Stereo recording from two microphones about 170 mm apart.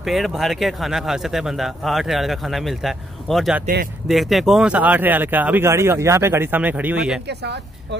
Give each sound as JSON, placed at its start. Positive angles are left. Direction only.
{"t": 0.0, "sound": "a man's voice", "side_deg": 0}
{"t": 7.2, "sound": "speech", "side_deg": -80}